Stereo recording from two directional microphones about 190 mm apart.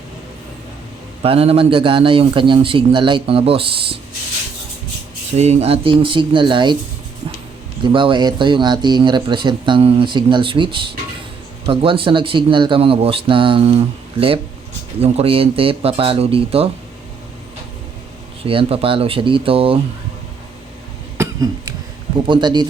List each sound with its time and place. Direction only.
1.2 s speech: 30° right (ahead or behind)
5.4 s speech: 35° right (ahead or behind)
7.9 s speech: 25° right (ahead or behind)
18.4 s speech: 30° right (ahead or behind)
21.2 s cough: 20° right (ahead or behind)
22.3 s speech: 25° right (ahead or behind)